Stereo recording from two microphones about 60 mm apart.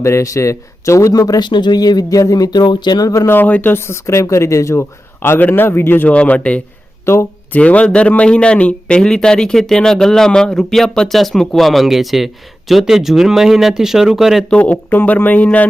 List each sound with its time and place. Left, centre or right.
0.0 s speech: left
3.2 s speech: left
4.8 s a man's voice: left
6.1 s speech: left
7.0 s speech: left
7.5 s speech: left; by 14.4 s centre
14.5 s speech: left